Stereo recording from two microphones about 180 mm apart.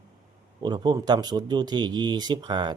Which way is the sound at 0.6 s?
25° right (ahead or behind).